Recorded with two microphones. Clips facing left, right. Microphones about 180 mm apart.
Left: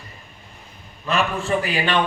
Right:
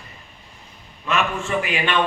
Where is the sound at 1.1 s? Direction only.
35° left (ahead or behind).